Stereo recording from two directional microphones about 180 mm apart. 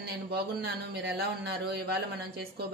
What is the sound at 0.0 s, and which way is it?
Speech, 60° right (ahead or behind).